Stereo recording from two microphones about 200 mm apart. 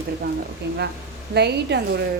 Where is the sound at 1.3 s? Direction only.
55° right (ahead or behind).